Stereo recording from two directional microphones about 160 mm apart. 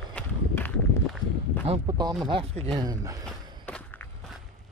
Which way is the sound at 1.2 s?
25° left (ahead or behind).